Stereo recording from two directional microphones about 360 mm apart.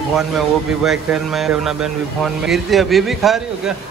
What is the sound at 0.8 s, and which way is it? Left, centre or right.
Speech, centre.